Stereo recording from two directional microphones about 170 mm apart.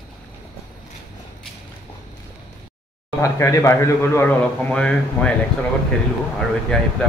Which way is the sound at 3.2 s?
15° left (ahead or behind).